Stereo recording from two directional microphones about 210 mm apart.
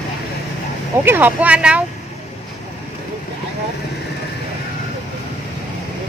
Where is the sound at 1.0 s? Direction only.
10° right (ahead or behind).